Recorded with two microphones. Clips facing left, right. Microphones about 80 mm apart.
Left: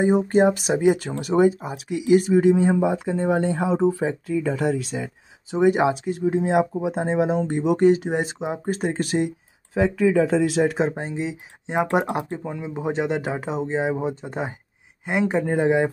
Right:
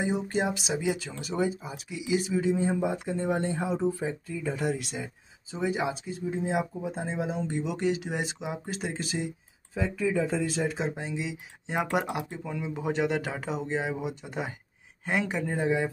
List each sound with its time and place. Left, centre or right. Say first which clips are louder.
0.0 s speech: left 11 dB; left
2.5 s speech: left 8 dB; left
5.0 s speech: left 7 dB; left
9.8 s speech: left 9 dB; left
15.1 s speech: left 4 dB; centre
15.5 s speech: left 7 dB; left